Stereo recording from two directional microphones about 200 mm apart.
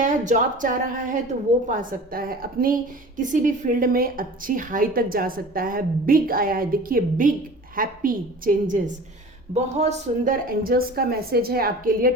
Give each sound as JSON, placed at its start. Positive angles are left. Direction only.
{"t": 0.0, "sound": "a woman's voice", "side_deg": -40}